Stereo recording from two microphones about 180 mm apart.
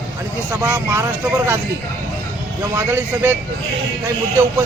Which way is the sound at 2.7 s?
15° right (ahead or behind).